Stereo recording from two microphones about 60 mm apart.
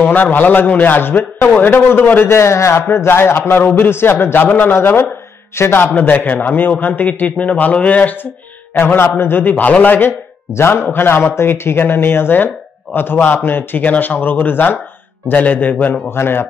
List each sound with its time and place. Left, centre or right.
0.0 s a man's voice: left
2.2 s a man's voice: left
8.7 s a man's voice: left
10.5 s a man's voice: left
16.1 s a man's voice: left